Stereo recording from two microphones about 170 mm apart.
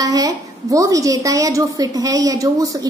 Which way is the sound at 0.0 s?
20° right (ahead or behind).